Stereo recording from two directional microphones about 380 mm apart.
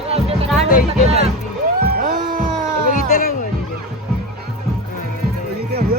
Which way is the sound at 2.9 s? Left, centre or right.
Centre.